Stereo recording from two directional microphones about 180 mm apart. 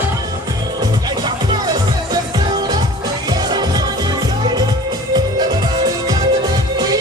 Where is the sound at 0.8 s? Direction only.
25° right (ahead or behind).